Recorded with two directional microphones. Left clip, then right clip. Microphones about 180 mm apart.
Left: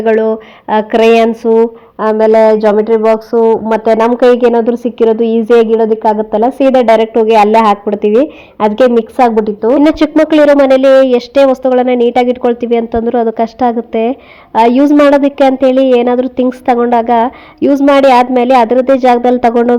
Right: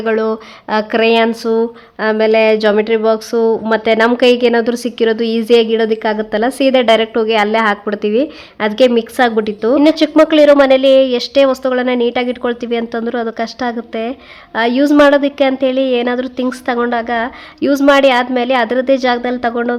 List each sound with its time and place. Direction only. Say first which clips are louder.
0.0 s a woman's voice: left 5 dB; centre (ahead or behind)
2.0 s a woman's voice: left 4 dB; 20° right (ahead or behind)
4.2 s a woman's voice: left 4 dB; centre (ahead or behind)
9.4 s a woman's voice: left 4 dB; 25° right (ahead or behind)
9.8 s a woman's voice: left 1 dB; 10° left (ahead or behind)